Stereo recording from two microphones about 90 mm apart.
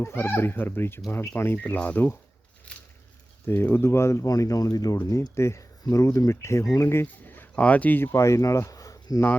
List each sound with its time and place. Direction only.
0.0 s speech: 25° left (ahead or behind)
2.7 s a sound: 10° left (ahead or behind)
3.4 s speech: 25° left (ahead or behind)
8.1 s speech: 35° left (ahead or behind)